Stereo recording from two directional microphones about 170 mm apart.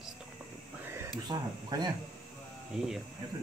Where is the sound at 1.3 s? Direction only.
25° right (ahead or behind).